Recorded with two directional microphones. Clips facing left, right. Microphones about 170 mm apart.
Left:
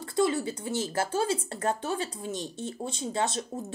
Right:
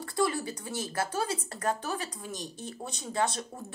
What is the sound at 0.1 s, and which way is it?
A woman's voice, 25° left (ahead or behind).